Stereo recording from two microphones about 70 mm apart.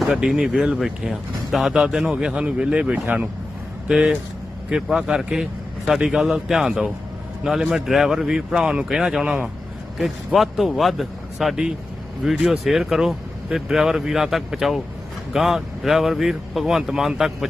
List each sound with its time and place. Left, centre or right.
0.3 s a man's voice: centre